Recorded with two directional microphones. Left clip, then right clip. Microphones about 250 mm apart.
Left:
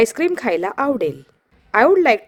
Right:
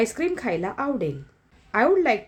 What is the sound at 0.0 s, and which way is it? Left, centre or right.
A woman's voice, left.